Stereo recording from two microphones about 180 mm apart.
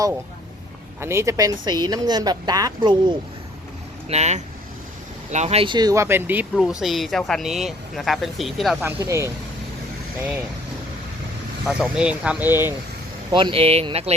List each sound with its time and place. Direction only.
1.0 s speech: 15° right (ahead or behind)
4.1 s speech: 40° right (ahead or behind); by 8.7 s centre (ahead or behind)
8.8 s speech: 15° right (ahead or behind)
11.6 s speech: 5° right (ahead or behind)
13.3 s speech: 30° right (ahead or behind)